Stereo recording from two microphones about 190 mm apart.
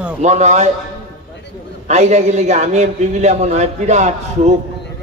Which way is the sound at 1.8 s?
35° right (ahead or behind).